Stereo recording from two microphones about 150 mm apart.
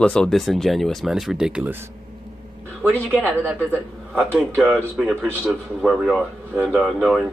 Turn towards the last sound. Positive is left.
turn(degrees=0)  # may be behind; listen again after turning